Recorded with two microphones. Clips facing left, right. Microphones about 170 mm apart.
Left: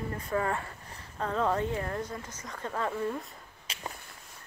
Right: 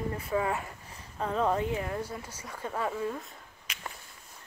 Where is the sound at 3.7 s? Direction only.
30° left (ahead or behind).